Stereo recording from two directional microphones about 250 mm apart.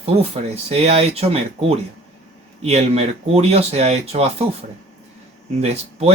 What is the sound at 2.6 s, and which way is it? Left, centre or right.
Speech, right.